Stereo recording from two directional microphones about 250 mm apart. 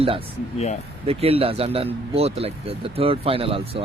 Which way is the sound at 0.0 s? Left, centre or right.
Right.